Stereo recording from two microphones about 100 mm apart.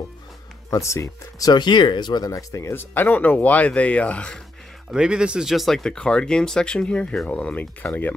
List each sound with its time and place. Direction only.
0.7 s speech: 30° left (ahead or behind)
1.5 s speech: 50° left (ahead or behind); by 4.4 s 10° left (ahead or behind)
4.9 s speech: 10° right (ahead or behind); by 8.1 s 15° left (ahead or behind)